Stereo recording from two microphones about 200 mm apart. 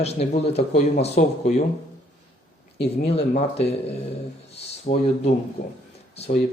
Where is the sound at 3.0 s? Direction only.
30° left (ahead or behind).